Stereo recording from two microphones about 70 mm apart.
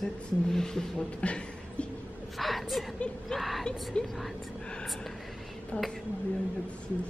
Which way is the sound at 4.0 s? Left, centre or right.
Centre.